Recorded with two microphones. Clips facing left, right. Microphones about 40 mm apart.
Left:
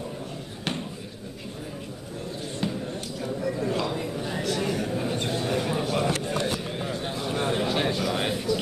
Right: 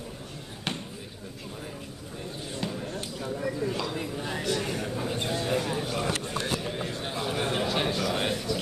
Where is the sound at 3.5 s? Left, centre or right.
Centre.